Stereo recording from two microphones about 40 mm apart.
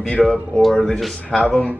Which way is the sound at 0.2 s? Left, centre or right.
Centre.